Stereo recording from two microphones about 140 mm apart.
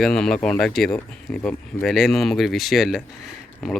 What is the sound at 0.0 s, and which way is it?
Speech, 5° left (ahead or behind).